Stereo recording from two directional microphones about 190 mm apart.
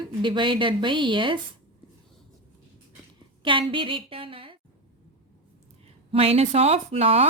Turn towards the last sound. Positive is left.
turn(degrees=-30)  # may be behind; listen again after turning